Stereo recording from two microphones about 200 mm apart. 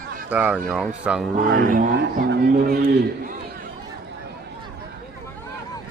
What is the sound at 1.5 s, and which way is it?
A man's voice, 45° right (ahead or behind).